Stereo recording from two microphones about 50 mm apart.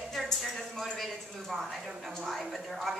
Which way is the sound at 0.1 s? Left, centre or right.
Centre.